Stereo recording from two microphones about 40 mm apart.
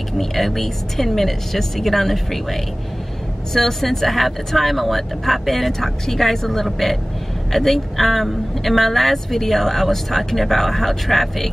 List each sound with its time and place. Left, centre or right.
0.2 s speech: centre